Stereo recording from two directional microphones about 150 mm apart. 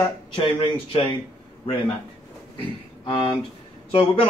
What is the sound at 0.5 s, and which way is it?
Speech, 35° left (ahead or behind).